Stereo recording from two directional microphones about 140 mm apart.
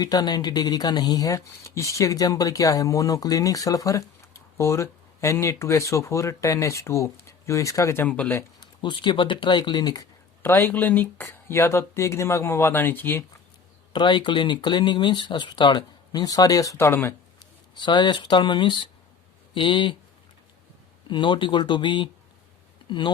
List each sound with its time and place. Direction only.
0.0 s speech: 30° left (ahead or behind); by 8.4 s 10° left (ahead or behind)
8.6 s speech: 35° left (ahead or behind)
10.4 s speech: 15° left (ahead or behind)
13.9 s speech: 35° left (ahead or behind); by 17.2 s 15° left (ahead or behind)
17.7 s speech: 30° left (ahead or behind)
21.1 s speech: 35° left (ahead or behind)